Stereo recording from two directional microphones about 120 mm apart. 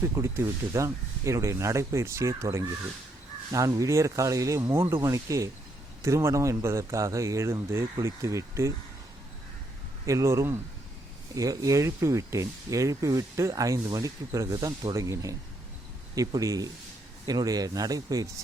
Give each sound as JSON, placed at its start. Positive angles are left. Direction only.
{"t": 0.0, "sound": "speech", "side_deg": -25}
{"t": 10.1, "sound": "speech", "side_deg": -25}